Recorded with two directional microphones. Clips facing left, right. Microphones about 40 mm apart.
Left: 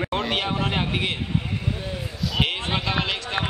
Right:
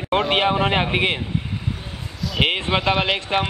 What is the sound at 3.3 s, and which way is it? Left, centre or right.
Speech, right.